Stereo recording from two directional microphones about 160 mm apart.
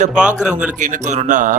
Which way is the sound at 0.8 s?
50° right (ahead or behind).